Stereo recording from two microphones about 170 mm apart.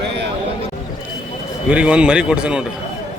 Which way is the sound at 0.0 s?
85° right.